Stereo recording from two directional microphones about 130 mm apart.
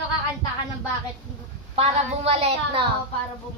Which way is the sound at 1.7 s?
50° right (ahead or behind).